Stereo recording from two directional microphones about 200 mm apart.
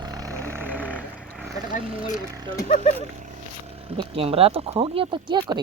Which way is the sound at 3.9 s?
25° right (ahead or behind).